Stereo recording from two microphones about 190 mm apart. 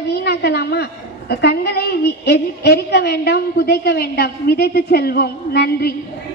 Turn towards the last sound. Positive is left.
turn(degrees=55)  # may be behind; listen again after turning